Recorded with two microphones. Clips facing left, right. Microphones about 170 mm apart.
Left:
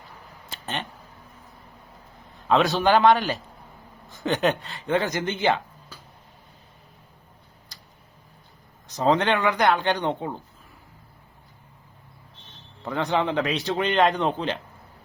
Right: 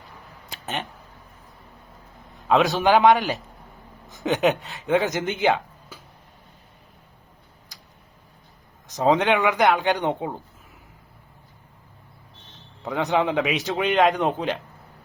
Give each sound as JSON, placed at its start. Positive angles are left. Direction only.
{"t": 0.6, "sound": "a sound", "side_deg": 0}
{"t": 2.5, "sound": "speech", "side_deg": 0}
{"t": 9.0, "sound": "speech", "side_deg": -5}
{"t": 12.8, "sound": "speech", "side_deg": -5}
{"t": 14.1, "sound": "speech", "side_deg": -15}